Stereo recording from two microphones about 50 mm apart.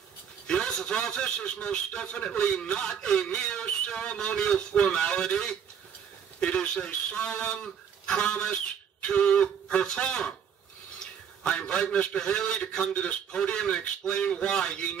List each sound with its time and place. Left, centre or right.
0.5 s a man's voice: centre
11.4 s a man's voice: left